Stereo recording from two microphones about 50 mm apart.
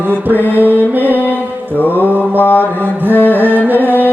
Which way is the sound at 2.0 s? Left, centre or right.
Right.